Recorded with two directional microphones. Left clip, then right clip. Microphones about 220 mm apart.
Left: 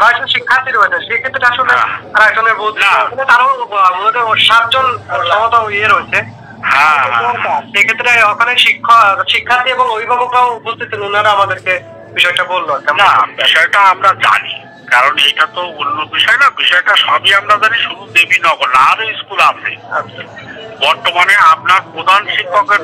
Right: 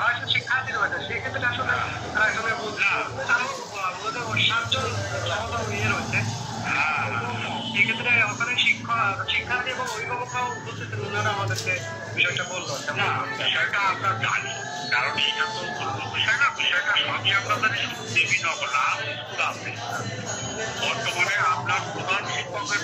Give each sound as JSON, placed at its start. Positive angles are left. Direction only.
{"t": 0.0, "sound": "a man's voice", "side_deg": 40}
{"t": 20.8, "sound": "a man's voice", "side_deg": 40}